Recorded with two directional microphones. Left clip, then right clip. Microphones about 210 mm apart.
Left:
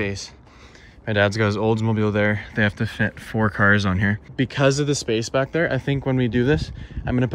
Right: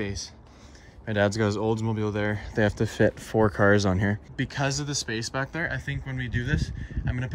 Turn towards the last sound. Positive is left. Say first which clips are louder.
# left 11 dB
turn(degrees=5)  # may be behind; listen again after turning